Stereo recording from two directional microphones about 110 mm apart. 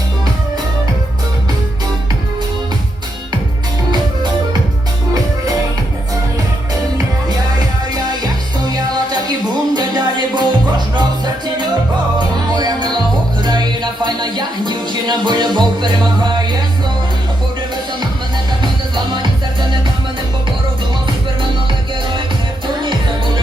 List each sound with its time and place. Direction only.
7.9 s music: 35° right (ahead or behind)
12.5 s music: 40° right (ahead or behind)
18.6 s music: 45° right (ahead or behind)
22.8 s music: 45° right (ahead or behind)